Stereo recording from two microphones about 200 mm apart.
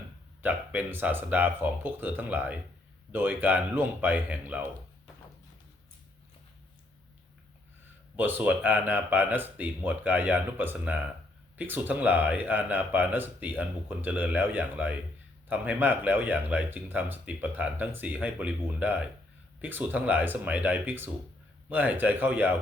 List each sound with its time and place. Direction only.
0.4 s speech: 10° right (ahead or behind)
8.1 s speech: 10° right (ahead or behind)